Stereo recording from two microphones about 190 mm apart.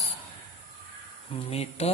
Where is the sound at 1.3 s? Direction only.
30° left (ahead or behind).